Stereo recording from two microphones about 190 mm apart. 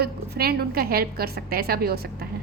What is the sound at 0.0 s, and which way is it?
A woman's voice, 55° right (ahead or behind).